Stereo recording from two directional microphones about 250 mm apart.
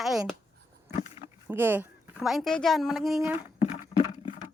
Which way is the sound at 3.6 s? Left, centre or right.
Left.